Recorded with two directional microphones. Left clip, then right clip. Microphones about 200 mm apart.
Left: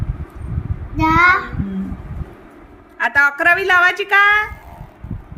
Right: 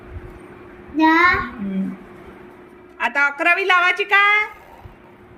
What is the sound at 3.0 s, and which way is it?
A woman's voice, 15° left (ahead or behind).